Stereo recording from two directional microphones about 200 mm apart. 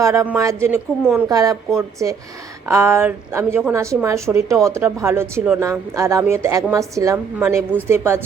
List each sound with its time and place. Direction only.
0.0 s a woman's voice: 15° right (ahead or behind)